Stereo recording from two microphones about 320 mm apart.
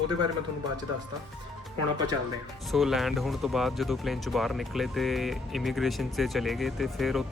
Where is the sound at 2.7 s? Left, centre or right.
Centre.